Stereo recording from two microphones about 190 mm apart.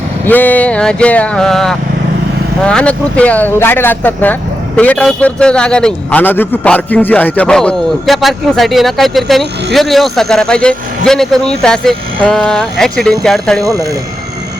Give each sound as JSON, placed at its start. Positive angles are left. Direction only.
{"t": 0.3, "sound": "speech", "side_deg": 10}
{"t": 13.6, "sound": "speech", "side_deg": -15}